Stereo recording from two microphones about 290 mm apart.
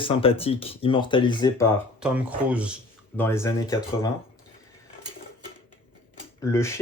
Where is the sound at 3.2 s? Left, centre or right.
Centre.